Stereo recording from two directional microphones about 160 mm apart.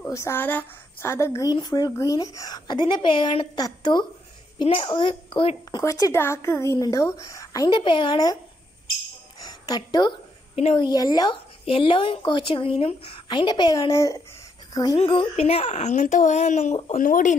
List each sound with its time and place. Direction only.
0.0 s a woman's voice: 15° left (ahead or behind); by 5.8 s 35° left (ahead or behind)
5.8 s a woman's voice: 20° left (ahead or behind)
9.5 s a woman's voice: 25° left (ahead or behind)
15.0 s speech: 35° left (ahead or behind)
17.0 s speech: 55° left (ahead or behind)